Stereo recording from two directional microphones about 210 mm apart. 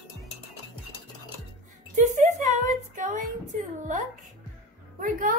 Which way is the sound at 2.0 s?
35° right (ahead or behind).